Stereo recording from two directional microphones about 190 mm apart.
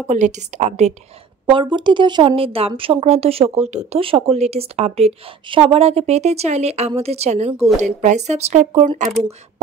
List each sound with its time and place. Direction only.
0.1 s speech: 40° right (ahead or behind)
1.4 s speech: 25° right (ahead or behind)